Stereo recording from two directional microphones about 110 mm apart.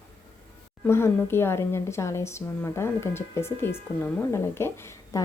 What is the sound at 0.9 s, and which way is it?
Speech, 20° left (ahead or behind).